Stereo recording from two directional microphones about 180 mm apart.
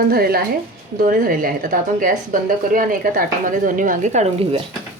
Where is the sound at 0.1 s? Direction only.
60° right (ahead or behind); by 4.6 s 35° right (ahead or behind).